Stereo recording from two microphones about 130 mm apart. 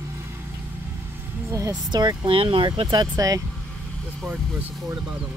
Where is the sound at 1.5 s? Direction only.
25° right (ahead or behind).